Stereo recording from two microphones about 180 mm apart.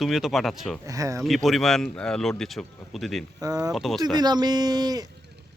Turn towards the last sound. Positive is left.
turn(degrees=-20)  # may be behind; listen again after turning